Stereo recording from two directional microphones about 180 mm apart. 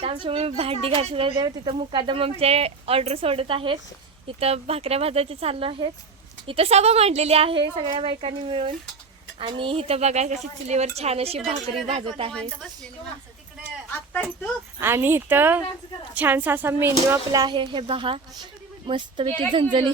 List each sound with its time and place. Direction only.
0.0 s speech: 30° right (ahead or behind)
14.8 s speech: 10° right (ahead or behind)